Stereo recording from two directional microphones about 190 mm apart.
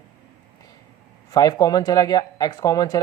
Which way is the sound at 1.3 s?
20° left (ahead or behind).